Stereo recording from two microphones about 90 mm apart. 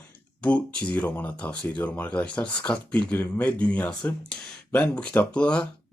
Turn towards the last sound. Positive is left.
turn(degrees=10)  # may be behind; listen again after turning